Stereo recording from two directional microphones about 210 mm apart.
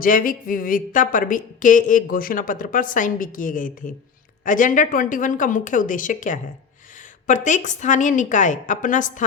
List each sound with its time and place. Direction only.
0.0 s a woman's voice: 40° left (ahead or behind)